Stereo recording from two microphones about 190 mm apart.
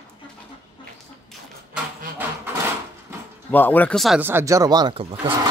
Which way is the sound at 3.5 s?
10° left (ahead or behind).